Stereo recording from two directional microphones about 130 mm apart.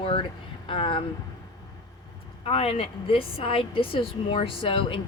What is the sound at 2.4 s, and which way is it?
A woman's voice, 50° left (ahead or behind).